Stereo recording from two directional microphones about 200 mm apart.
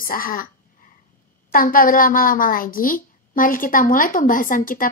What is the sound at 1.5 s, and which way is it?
Speech, 45° left (ahead or behind).